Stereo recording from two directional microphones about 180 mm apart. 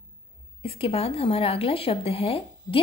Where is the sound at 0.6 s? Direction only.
35° left (ahead or behind).